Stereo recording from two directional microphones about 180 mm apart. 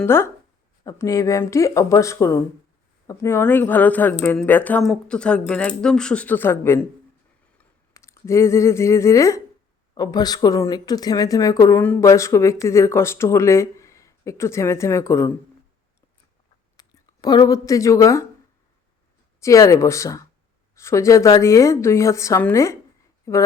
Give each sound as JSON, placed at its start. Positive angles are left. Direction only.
{"t": 0.0, "sound": "speech", "side_deg": 15}
{"t": 7.9, "sound": "speech", "side_deg": 15}
{"t": 16.7, "sound": "speech", "side_deg": 20}
{"t": 19.4, "sound": "speech", "side_deg": 15}